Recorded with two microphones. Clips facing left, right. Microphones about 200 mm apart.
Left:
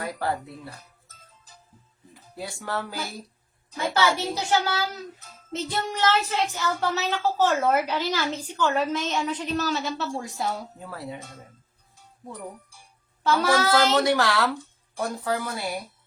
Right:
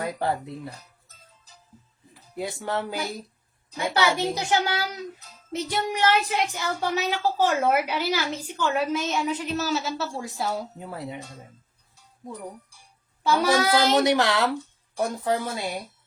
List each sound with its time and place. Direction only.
0.0 s speech: 20° right (ahead or behind)
2.3 s speech: 20° right (ahead or behind); by 10.5 s centre (ahead or behind)
10.8 s speech: 20° right (ahead or behind)
13.2 s speech: 10° right (ahead or behind)